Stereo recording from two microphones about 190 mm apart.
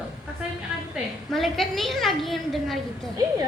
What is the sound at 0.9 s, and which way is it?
A woman's voice, centre (ahead or behind).